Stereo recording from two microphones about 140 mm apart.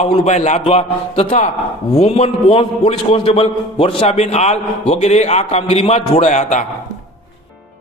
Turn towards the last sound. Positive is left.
turn(degrees=60)  # may be behind; listen again after turning